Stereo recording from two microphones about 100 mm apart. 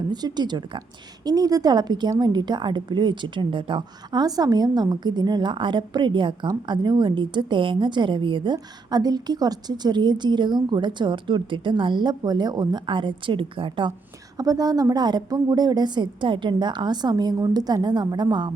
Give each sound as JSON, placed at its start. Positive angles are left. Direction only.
{"t": 0.1, "sound": "a woman's voice", "side_deg": -45}
{"t": 8.5, "sound": "a woman's voice", "side_deg": -40}
{"t": 14.3, "sound": "a woman's voice", "side_deg": -35}